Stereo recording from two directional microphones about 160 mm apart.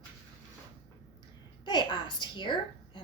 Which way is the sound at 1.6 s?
30° left (ahead or behind).